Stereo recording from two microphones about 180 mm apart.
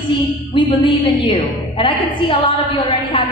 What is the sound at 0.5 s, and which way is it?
A woman's voice, 25° left (ahead or behind).